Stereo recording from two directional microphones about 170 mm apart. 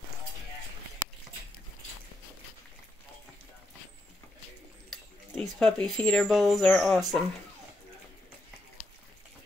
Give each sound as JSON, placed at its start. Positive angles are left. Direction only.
{"t": 4.8, "sound": "speech", "side_deg": 0}